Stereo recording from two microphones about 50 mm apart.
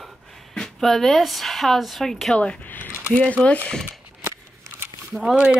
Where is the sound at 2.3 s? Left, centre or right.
Left.